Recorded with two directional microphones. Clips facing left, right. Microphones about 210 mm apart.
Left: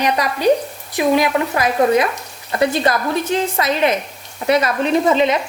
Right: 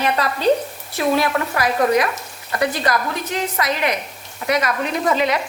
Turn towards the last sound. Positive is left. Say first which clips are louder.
# left 5 dB
turn(degrees=25)  # may be behind; listen again after turning